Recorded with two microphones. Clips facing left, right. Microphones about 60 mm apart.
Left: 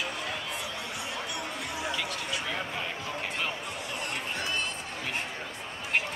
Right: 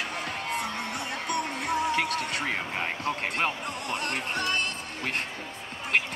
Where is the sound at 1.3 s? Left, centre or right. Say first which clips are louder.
Right 7 dB; right.